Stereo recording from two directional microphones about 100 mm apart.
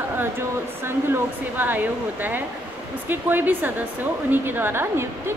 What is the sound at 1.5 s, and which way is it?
A woman's voice, 20° right (ahead or behind).